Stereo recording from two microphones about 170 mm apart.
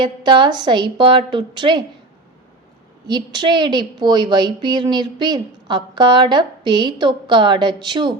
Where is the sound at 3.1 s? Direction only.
25° right (ahead or behind).